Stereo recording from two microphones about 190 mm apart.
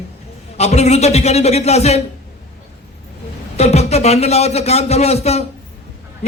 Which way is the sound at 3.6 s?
35° left (ahead or behind).